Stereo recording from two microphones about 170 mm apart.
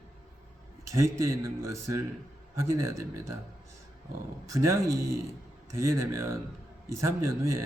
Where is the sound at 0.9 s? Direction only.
15° right (ahead or behind).